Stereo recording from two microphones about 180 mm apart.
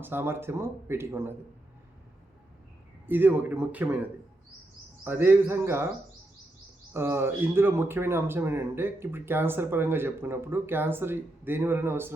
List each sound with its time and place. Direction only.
0.0 s speech: 10° right (ahead or behind)
3.1 s speech: 10° right (ahead or behind)
5.0 s speech: 10° right (ahead or behind)
6.9 s speech: 15° right (ahead or behind)